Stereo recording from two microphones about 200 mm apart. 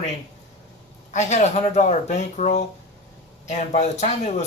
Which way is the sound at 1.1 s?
35° left (ahead or behind).